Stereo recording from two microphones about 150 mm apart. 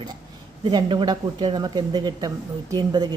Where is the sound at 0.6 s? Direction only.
30° right (ahead or behind).